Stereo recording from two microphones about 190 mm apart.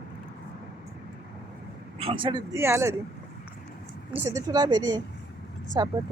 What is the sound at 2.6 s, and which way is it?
Speech, 15° right (ahead or behind).